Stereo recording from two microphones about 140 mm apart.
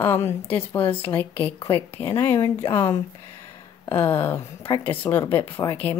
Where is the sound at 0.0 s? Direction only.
20° left (ahead or behind).